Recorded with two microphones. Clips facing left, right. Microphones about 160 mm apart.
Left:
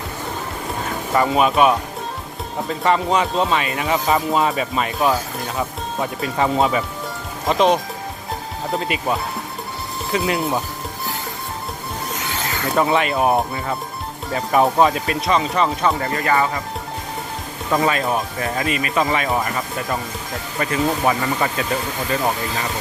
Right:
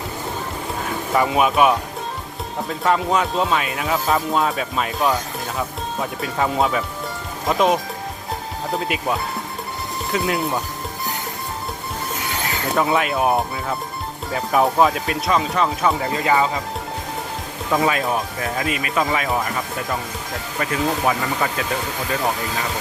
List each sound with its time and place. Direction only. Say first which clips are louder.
0.9 s speech: left 1 dB; centre (ahead or behind)
12.6 s speech: left 2 dB; centre (ahead or behind)
16.1 s speech: even; 15° right (ahead or behind)
17.7 s speech: left 1 dB; centre (ahead or behind)